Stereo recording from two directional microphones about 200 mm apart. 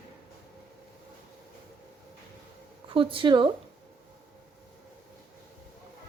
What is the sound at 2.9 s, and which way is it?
Speech, 25° right (ahead or behind).